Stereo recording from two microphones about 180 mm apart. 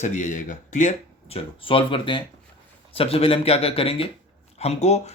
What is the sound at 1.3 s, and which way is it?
A man's voice, 30° left (ahead or behind).